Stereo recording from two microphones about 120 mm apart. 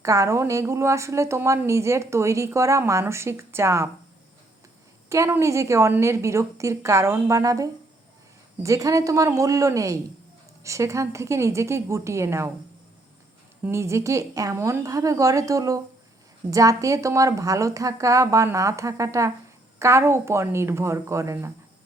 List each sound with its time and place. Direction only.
0.0 s a woman's voice: 25° right (ahead or behind)
5.0 s a woman's voice: 25° right (ahead or behind)
13.6 s a woman's voice: 20° right (ahead or behind)